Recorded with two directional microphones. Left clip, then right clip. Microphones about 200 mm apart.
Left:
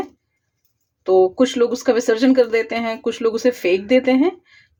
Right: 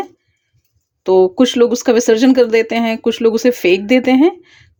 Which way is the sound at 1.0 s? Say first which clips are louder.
Right 3 dB; 30° right (ahead or behind).